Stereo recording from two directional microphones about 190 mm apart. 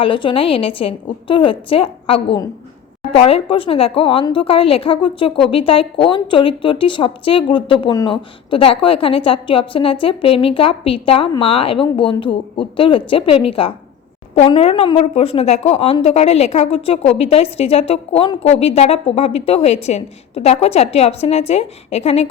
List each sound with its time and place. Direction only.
0.0 s a woman's voice: 25° left (ahead or behind)